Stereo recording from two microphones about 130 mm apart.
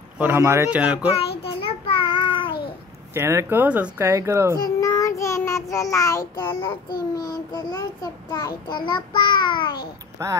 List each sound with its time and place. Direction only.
0.2 s speech: 20° right (ahead or behind)
0.7 s a child's voice: 10° right (ahead or behind)
1.1 s child singing: 45° left (ahead or behind)
3.2 s speech: 20° right (ahead or behind)
4.6 s child singing: 25° left (ahead or behind)
10.2 s speech: 25° right (ahead or behind)